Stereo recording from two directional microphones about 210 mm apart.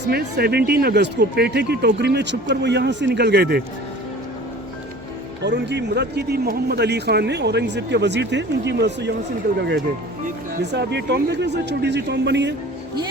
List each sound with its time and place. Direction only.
0.1 s speech: 50° right (ahead or behind)
5.4 s a man's voice: 55° right (ahead or behind)